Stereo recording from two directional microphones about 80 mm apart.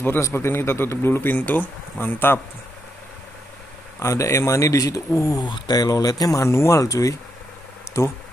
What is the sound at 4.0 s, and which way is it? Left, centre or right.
Speech, left.